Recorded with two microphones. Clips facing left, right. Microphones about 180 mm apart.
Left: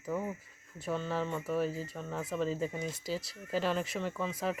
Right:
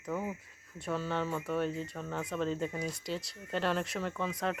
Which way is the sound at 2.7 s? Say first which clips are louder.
Right 1 dB; 25° left (ahead or behind).